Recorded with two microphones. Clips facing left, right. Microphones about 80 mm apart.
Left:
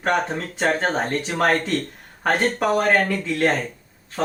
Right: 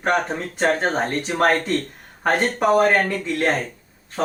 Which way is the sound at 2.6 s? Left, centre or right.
Right.